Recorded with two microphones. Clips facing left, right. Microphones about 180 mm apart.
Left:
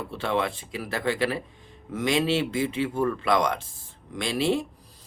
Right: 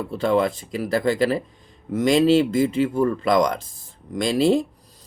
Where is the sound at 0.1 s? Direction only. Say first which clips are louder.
Right 7 dB; 40° right (ahead or behind).